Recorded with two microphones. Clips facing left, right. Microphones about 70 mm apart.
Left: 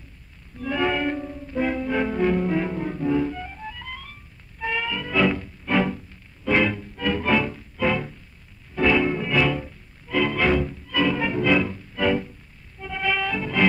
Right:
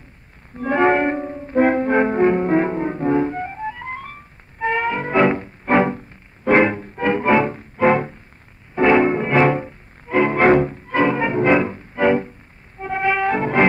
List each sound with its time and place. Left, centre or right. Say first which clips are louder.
0.6 s music: right 8 dB; right